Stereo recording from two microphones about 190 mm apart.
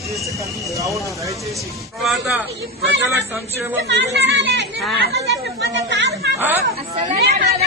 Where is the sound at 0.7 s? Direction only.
15° right (ahead or behind).